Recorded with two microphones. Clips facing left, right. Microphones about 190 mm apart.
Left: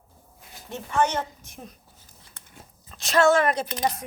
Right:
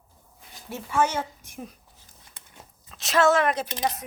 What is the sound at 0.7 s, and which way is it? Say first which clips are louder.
A woman's voice: left 1 dB; 10° right (ahead or behind).